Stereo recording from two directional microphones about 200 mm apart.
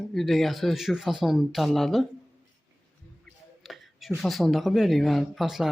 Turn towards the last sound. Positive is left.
turn(degrees=0)  # may be behind; listen again after turning